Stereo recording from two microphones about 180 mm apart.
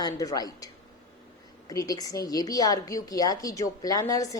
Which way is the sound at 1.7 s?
20° left (ahead or behind).